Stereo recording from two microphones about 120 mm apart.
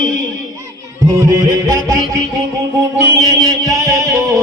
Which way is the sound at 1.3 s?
30° right (ahead or behind).